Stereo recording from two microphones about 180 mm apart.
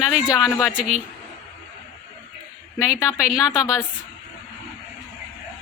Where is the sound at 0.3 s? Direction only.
15° left (ahead or behind).